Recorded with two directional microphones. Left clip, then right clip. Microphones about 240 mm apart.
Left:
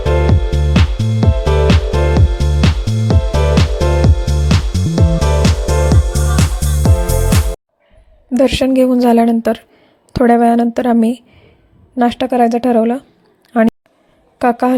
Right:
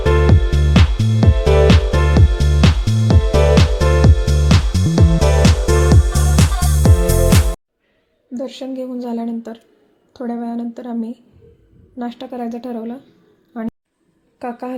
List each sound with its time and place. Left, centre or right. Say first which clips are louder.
0.0 s music: even; centre
8.4 s a woman's voice: left 14 dB; left
14.3 s a woman's voice: left 13 dB; left